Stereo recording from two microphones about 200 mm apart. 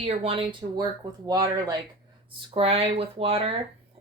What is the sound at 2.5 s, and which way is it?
A woman's voice, 30° right (ahead or behind).